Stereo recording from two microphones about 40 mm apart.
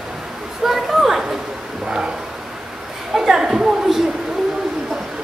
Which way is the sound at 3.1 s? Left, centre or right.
Centre.